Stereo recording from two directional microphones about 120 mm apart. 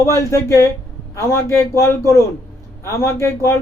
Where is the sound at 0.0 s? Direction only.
25° left (ahead or behind).